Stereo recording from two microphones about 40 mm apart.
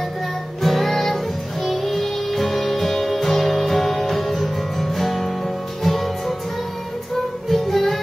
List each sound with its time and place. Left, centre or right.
0.6 s music: centre
7.5 s music: centre